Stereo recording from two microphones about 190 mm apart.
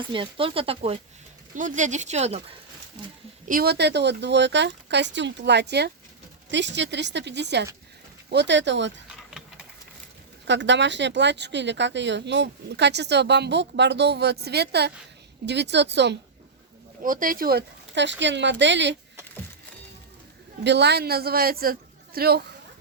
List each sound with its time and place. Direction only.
0.1 s speech: 25° right (ahead or behind)
1.5 s speech: 40° right (ahead or behind)
3.5 s speech: 55° right (ahead or behind)
10.4 s speech: 70° right (ahead or behind)
17.0 s speech: 45° right (ahead or behind); by 18.9 s 70° right (ahead or behind)
20.7 s a man's voice: 60° right (ahead or behind)